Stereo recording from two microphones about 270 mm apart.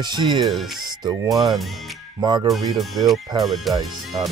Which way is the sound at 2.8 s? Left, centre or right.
Centre.